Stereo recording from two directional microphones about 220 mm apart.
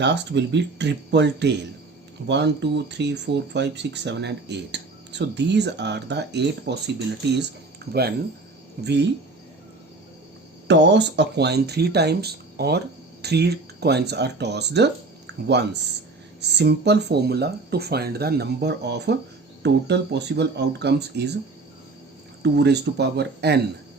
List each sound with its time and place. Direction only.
0.0 s speech: 50° right (ahead or behind)
7.8 s a sound: 45° right (ahead or behind)
8.8 s speech: 50° right (ahead or behind)
10.7 s speech: 50° right (ahead or behind)
15.3 s a sound: 50° right (ahead or behind)
16.4 s speech: 50° right (ahead or behind)
22.4 s speech: 50° right (ahead or behind)